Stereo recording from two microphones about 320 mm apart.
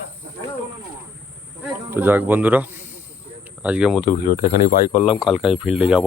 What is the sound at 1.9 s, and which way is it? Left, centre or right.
Speech, centre.